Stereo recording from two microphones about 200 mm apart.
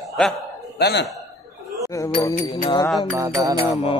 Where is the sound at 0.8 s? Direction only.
60° left (ahead or behind).